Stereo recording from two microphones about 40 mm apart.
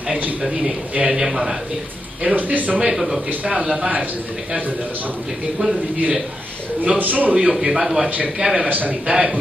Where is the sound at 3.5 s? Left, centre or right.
Right.